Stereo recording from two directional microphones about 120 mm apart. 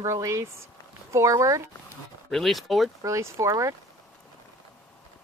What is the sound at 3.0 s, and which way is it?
Speech, 25° right (ahead or behind).